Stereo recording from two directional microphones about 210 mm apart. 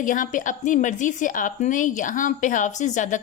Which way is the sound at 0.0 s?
40° left (ahead or behind).